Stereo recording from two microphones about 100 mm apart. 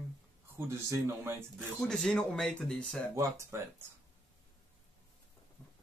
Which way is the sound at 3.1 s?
30° right (ahead or behind).